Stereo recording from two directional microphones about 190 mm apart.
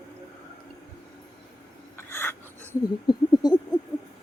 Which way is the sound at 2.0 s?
15° left (ahead or behind).